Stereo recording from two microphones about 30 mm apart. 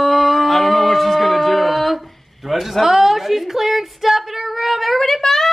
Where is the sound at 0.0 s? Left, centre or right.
Centre.